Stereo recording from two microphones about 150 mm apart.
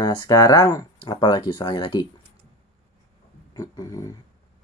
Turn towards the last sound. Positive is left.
turn(degrees=20)  # may be behind; listen again after turning